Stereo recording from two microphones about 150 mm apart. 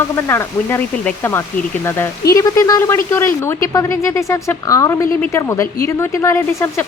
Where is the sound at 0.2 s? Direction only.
15° left (ahead or behind).